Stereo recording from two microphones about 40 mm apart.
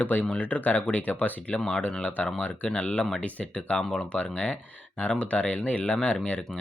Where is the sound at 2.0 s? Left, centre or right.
Left.